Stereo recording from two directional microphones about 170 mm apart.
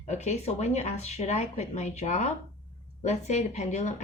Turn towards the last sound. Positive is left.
turn(degrees=45)  # may be behind; listen again after turning